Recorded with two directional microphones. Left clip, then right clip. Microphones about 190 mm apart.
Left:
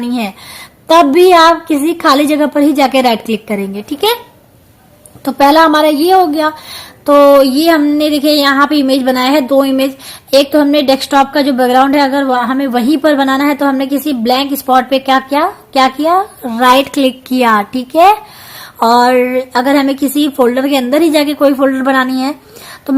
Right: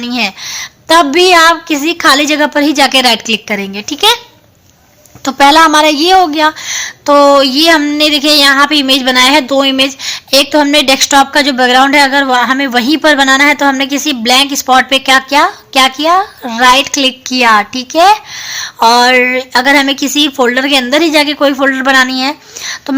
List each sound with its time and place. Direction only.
0.0 s a woman's voice: 10° right (ahead or behind)
5.2 s a woman's voice: 30° right (ahead or behind)